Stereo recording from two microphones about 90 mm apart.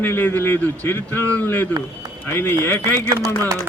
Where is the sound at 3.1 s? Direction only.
35° right (ahead or behind).